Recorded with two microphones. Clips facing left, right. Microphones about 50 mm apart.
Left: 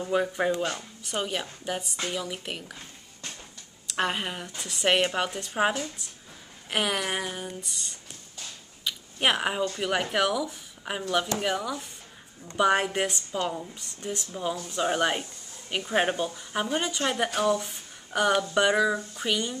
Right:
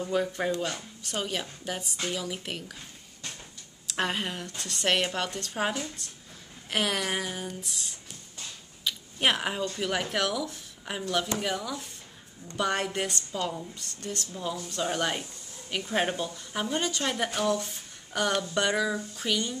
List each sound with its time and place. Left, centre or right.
0.0 s a woman's voice: centre
0.7 s a woman's voice: centre
3.8 s a woman's voice: centre
8.8 s a sound: centre
9.8 s a woman's voice: centre